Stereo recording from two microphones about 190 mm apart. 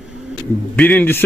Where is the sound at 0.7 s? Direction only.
10° left (ahead or behind).